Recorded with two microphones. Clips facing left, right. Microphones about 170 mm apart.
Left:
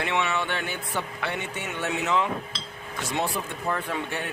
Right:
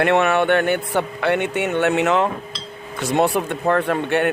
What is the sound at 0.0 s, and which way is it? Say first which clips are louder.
Speech: right 11 dB; 60° right (ahead or behind).